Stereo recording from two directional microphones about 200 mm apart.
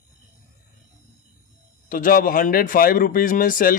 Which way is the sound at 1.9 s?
45° left (ahead or behind).